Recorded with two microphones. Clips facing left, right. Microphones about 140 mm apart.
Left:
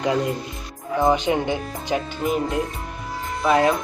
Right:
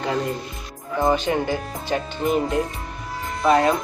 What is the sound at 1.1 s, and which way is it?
Speech, 15° left (ahead or behind).